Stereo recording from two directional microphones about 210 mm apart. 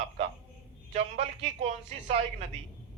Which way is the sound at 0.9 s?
30° right (ahead or behind).